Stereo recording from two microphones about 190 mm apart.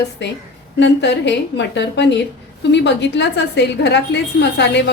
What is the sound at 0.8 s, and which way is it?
A woman's voice, 70° left (ahead or behind).